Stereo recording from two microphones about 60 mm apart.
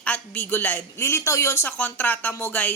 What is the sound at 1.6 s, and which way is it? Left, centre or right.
A woman's voice, left.